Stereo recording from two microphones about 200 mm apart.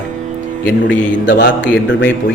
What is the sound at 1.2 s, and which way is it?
Speech, 65° left (ahead or behind).